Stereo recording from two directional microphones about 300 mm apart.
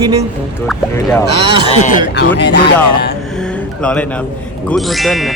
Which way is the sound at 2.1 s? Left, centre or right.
Left.